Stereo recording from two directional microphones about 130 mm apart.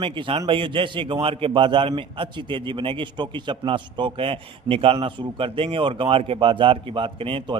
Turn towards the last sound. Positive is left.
turn(degrees=-45)  # may be behind; listen again after turning